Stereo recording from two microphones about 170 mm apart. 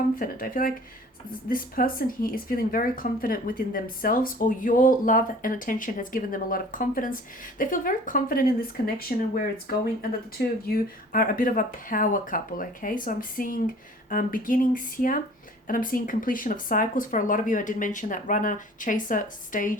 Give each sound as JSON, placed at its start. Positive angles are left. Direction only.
{"t": 0.2, "sound": "speech", "side_deg": 55}